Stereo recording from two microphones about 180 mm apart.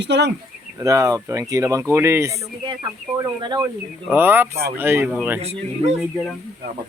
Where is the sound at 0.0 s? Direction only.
75° right (ahead or behind).